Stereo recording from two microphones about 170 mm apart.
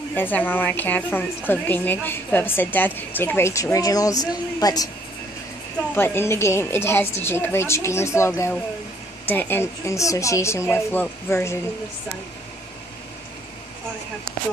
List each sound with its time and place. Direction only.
0.1 s a woman's voice: 10° left (ahead or behind)
5.9 s a woman's voice: 15° left (ahead or behind)